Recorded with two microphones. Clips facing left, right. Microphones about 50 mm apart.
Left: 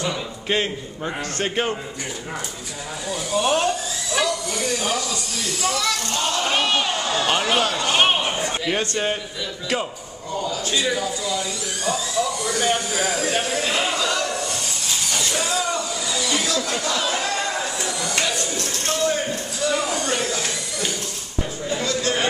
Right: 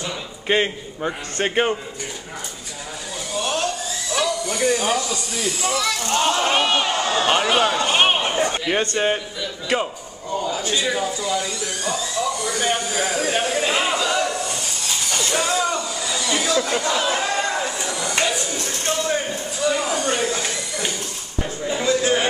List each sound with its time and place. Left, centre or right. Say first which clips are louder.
0.5 s speech: right 3 dB; centre
3.3 s a sound: left 4 dB; centre
4.5 s speech: right 4 dB; centre
11.0 s speech: right 2 dB; right
11.8 s speech: left 1 dB; centre
15.0 s vehicle: right 3 dB; centre
16.1 s a sound: right 2 dB; centre
18.2 s speech: right 2 dB; centre